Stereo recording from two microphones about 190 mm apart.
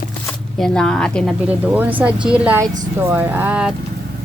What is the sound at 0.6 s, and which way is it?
A woman's voice, 5° left (ahead or behind).